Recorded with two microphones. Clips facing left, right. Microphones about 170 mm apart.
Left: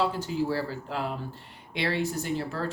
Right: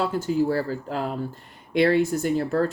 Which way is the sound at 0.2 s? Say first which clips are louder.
Right 6 dB; 50° right (ahead or behind).